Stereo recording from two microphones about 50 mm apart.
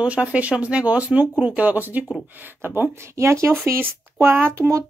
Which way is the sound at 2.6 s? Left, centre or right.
Right.